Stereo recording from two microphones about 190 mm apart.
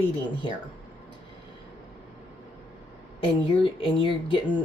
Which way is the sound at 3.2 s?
25° left (ahead or behind).